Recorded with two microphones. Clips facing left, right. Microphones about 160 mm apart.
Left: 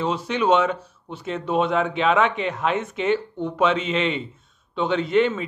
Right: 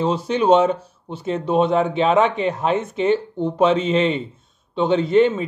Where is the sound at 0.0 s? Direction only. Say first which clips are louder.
Right 4 dB; 35° right (ahead or behind).